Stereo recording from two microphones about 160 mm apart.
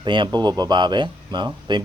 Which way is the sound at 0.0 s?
30° right (ahead or behind).